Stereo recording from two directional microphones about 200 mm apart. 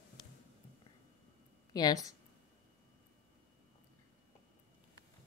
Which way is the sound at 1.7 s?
20° left (ahead or behind).